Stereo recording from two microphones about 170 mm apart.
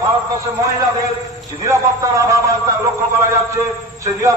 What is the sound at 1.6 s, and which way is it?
A man's voice, 20° right (ahead or behind).